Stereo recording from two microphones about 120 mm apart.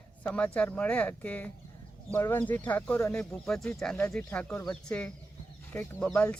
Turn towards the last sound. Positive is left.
turn(degrees=10)  # may be behind; listen again after turning